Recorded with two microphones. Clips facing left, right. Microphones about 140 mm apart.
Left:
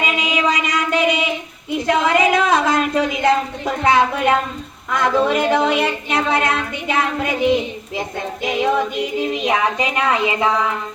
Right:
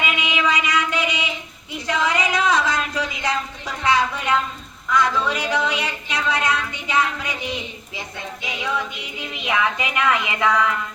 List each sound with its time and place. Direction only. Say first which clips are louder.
0.0 s music: left 3 dB; 40° left (ahead or behind)
1.7 s speech: left 6 dB; 55° left (ahead or behind)
4.9 s a sound: left 4 dB; 55° left (ahead or behind); by 10.8 s 25° left (ahead or behind)